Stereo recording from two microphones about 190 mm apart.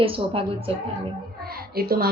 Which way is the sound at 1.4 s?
55° right (ahead or behind).